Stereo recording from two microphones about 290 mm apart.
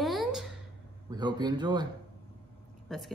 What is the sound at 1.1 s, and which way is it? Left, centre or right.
Speech, centre.